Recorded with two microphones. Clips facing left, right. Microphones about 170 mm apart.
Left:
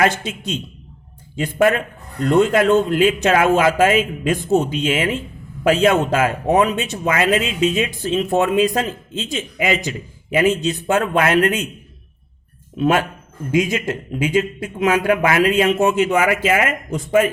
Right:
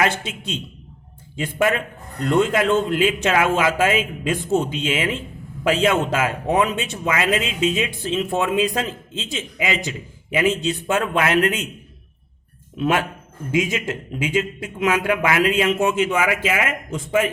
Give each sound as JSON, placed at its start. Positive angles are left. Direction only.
{"t": 0.0, "sound": "a man's voice", "side_deg": 45}
{"t": 12.7, "sound": "speech", "side_deg": 40}